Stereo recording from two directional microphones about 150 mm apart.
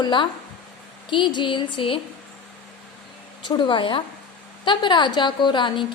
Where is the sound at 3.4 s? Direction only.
30° left (ahead or behind).